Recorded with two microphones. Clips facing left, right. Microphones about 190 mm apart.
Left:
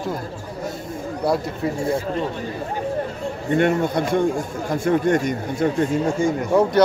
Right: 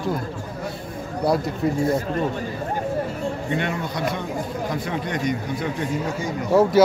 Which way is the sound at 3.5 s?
50° left (ahead or behind).